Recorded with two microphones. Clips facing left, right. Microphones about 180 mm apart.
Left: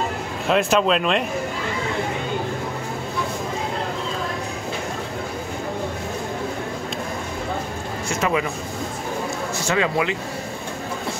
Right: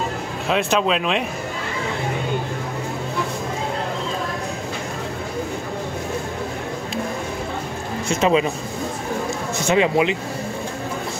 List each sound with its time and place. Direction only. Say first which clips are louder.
0.5 s speech: left 1 dB; centre (ahead or behind)
8.1 s speech: right 5 dB; 25° right (ahead or behind)
9.7 s speech: right 4 dB; 20° right (ahead or behind)